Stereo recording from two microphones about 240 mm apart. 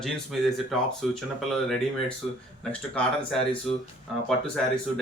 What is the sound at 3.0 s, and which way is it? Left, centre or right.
A man's voice, centre.